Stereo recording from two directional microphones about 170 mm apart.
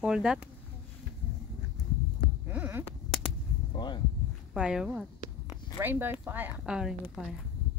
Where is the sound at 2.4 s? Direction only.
10° right (ahead or behind).